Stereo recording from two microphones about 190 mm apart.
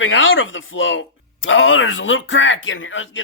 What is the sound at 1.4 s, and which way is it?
Speech, 90° left.